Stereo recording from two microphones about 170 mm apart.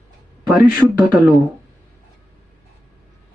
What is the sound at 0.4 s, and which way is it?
Speech, 20° right (ahead or behind).